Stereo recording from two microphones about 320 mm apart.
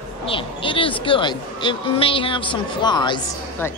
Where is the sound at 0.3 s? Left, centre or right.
Centre.